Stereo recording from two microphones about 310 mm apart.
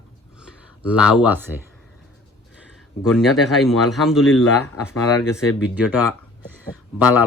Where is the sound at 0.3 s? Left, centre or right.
Centre.